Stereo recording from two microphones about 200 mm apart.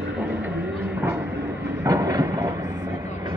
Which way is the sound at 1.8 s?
15° right (ahead or behind).